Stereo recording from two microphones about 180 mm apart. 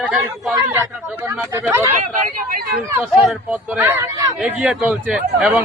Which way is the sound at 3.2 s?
5° right (ahead or behind).